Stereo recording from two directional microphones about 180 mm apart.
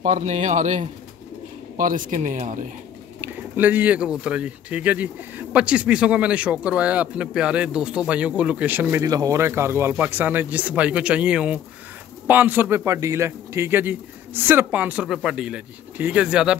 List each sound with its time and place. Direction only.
0.0 s a man's voice: 40° right (ahead or behind)
3.2 s speech: 10° right (ahead or behind)